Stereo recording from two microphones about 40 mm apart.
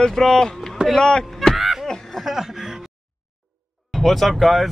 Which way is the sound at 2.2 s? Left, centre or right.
Centre.